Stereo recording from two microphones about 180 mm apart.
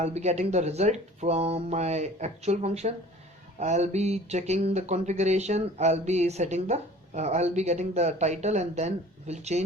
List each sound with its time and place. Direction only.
0.0 s speech: 35° right (ahead or behind)